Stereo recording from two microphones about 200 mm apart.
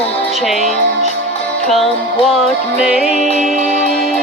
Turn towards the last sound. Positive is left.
turn(degrees=0)  # may be behind; listen again after turning